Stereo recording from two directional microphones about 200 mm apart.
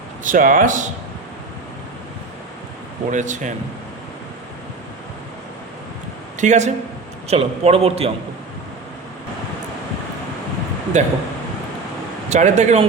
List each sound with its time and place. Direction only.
0.3 s a man's voice: 45° right (ahead or behind)
3.1 s a man's voice: 40° right (ahead or behind)
6.4 s a man's voice: 35° right (ahead or behind)
10.9 s a man's voice: 35° right (ahead or behind)
12.3 s a man's voice: 35° right (ahead or behind)